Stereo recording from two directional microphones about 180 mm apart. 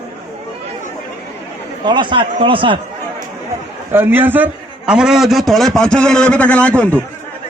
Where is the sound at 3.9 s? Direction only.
10° right (ahead or behind); by 7.0 s 5° left (ahead or behind).